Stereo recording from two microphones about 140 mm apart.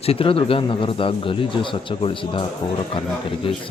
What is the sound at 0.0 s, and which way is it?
A man's voice, 45° left (ahead or behind).